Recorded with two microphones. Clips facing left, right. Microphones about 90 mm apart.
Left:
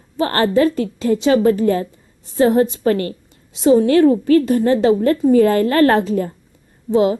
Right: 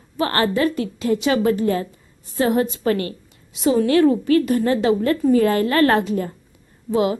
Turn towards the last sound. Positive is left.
turn(degrees=30)  # may be behind; listen again after turning